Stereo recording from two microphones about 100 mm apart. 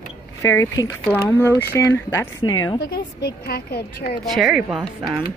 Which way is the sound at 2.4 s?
40° left (ahead or behind).